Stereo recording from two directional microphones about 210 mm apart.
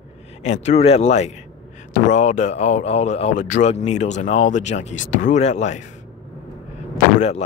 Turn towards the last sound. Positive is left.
turn(degrees=30)  # may be behind; listen again after turning